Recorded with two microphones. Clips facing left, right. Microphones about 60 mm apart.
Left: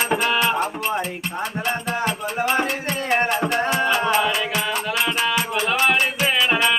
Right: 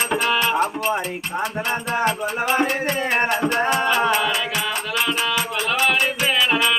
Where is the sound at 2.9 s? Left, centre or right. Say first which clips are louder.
Right 1 dB; centre.